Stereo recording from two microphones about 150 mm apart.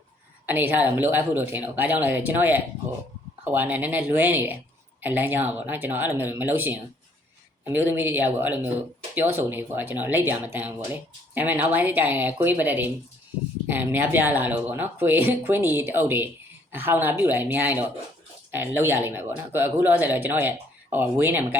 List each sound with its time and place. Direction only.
0.4 s speech: 15° right (ahead or behind)